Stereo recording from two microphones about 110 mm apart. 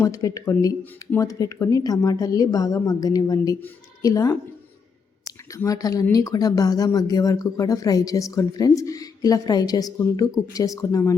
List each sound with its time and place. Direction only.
0.0 s speech: 30° left (ahead or behind)
5.5 s speech: 30° left (ahead or behind)